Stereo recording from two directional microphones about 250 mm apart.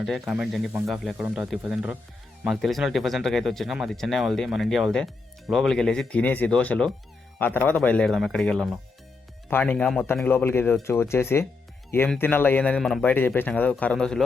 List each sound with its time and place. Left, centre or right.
0.0 s speech: centre